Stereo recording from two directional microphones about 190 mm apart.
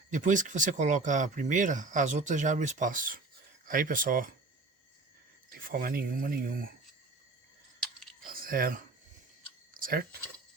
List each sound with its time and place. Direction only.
0.1 s speech: 40° right (ahead or behind)
5.5 s speech: 50° right (ahead or behind)
8.2 s a sound: 50° right (ahead or behind)
9.8 s speech: 50° right (ahead or behind)